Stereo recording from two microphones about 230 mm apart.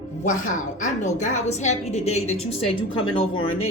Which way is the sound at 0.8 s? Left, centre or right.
Left.